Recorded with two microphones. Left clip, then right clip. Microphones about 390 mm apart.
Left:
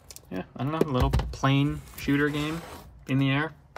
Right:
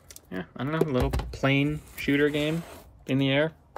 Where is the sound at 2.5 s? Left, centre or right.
Centre.